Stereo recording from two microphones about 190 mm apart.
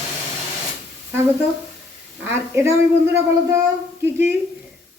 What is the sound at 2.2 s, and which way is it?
Speech, 15° right (ahead or behind).